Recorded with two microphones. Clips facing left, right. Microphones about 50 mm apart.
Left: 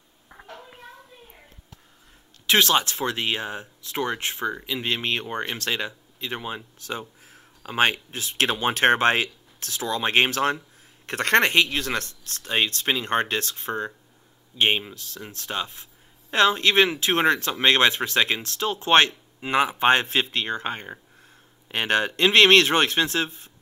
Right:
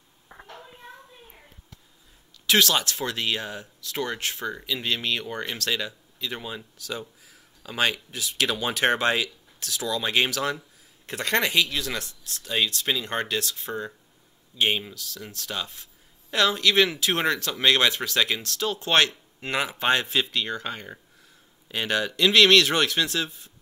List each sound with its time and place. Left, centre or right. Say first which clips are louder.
0.3 s a sound: right 1 dB; centre
2.4 s speech: left 2 dB; left
11.1 s speech: left 5 dB; left
19.4 s speech: left 4 dB; centre
19.8 s speech: even; left